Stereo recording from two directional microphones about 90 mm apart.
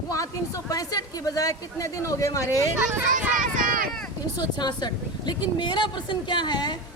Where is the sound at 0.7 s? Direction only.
40° left (ahead or behind).